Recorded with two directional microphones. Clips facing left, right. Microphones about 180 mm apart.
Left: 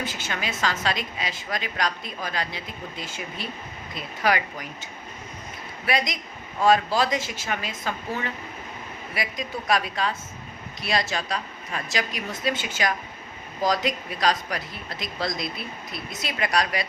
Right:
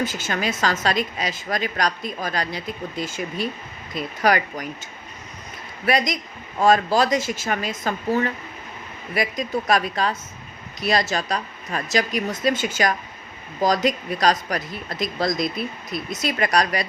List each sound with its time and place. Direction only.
0.0 s a woman's voice: 40° right (ahead or behind)